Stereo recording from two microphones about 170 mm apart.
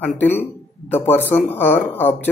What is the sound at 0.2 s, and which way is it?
Speech, 10° left (ahead or behind).